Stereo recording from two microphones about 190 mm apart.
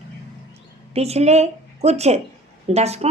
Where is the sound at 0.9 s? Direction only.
35° right (ahead or behind).